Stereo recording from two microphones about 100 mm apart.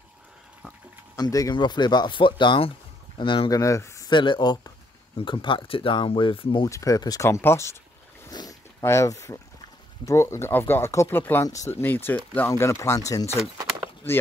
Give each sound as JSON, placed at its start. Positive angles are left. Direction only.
{"t": 1.1, "sound": "speech", "side_deg": 35}
{"t": 3.4, "sound": "speech", "side_deg": 35}
{"t": 4.1, "sound": "speech", "side_deg": 50}
{"t": 6.6, "sound": "speech", "side_deg": 35}
{"t": 8.3, "sound": "boat", "side_deg": 40}
{"t": 8.8, "sound": "speech", "side_deg": 30}
{"t": 11.4, "sound": "speech", "side_deg": 35}
{"t": 11.7, "sound": "speech", "side_deg": 20}